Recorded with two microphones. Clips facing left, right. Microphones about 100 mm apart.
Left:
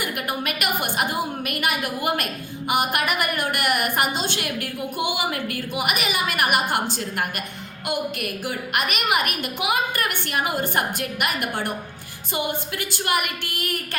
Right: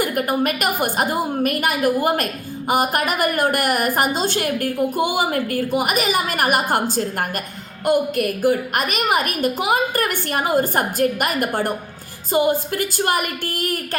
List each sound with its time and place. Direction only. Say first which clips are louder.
0.0 s a woman's voice: right 7 dB; 40° right (ahead or behind)